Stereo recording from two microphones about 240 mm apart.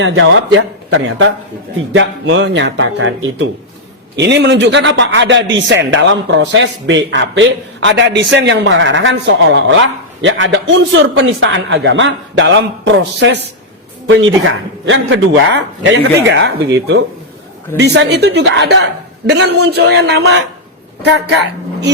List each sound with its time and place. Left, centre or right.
0.0 s a man's voice: right